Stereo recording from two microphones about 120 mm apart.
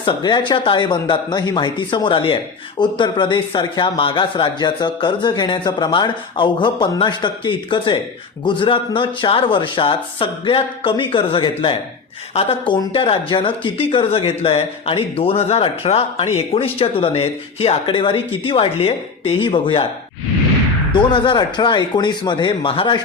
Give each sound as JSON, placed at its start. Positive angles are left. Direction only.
{"t": 0.0, "sound": "speech", "side_deg": 40}
{"t": 20.9, "sound": "speech", "side_deg": 40}